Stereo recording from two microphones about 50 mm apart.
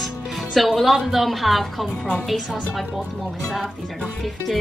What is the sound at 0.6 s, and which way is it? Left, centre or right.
A woman's voice, centre.